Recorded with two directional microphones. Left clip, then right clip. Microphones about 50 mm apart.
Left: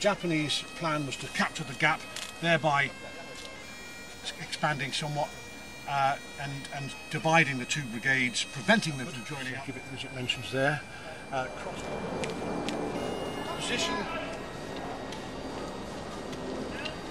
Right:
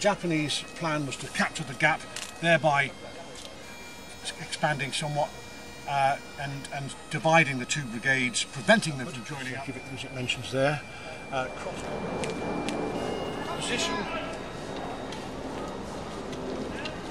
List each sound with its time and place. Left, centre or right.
0.0 s speech: centre
4.3 s speech: centre
11.4 s speech: centre
12.3 s vehicle: centre
13.1 s a sound: right
13.6 s speech: centre
14.3 s music: centre